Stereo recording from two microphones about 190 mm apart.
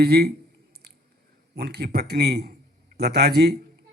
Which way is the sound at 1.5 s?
55° right (ahead or behind).